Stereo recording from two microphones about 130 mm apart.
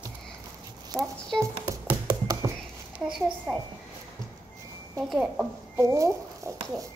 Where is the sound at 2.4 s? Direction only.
20° right (ahead or behind).